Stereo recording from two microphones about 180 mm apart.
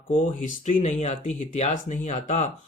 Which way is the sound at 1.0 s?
35° left (ahead or behind).